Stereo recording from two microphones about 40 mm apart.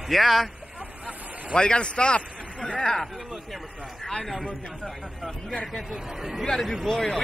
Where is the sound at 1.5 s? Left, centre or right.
Left.